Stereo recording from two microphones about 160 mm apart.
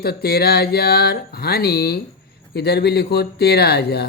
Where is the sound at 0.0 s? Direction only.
80° left.